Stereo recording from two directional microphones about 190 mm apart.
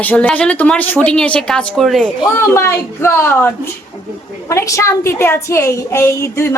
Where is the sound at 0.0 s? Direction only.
5° left (ahead or behind).